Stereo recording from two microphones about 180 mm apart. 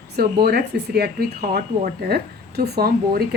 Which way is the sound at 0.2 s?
60° right (ahead or behind).